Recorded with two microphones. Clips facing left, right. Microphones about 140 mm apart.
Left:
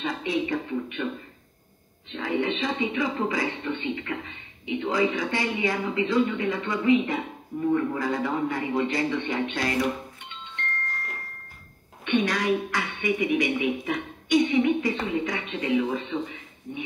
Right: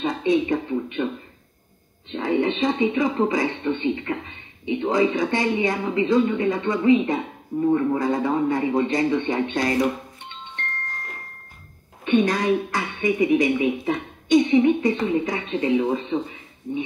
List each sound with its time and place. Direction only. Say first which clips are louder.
0.0 s speech: right 6 dB; 25° right (ahead or behind)
2.0 s a woman's voice: right 5 dB; 30° right (ahead or behind)
12.0 s a woman's voice: right 5 dB; 25° right (ahead or behind)